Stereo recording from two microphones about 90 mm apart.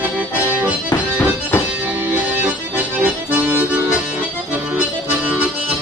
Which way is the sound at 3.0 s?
15° right (ahead or behind).